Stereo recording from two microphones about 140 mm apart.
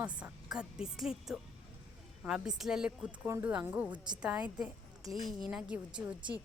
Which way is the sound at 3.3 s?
20° right (ahead or behind).